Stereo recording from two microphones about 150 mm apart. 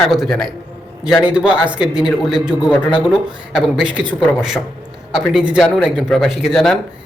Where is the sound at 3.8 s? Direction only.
10° right (ahead or behind).